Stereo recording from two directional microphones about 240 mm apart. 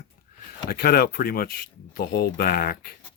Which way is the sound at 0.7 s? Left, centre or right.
Left.